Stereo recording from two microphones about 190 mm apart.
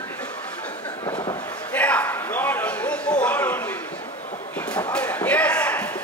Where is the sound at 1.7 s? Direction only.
5° left (ahead or behind).